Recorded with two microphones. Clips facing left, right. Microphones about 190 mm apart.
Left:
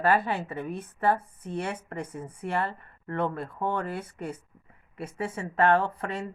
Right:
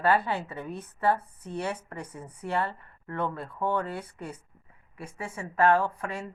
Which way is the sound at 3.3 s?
30° left (ahead or behind).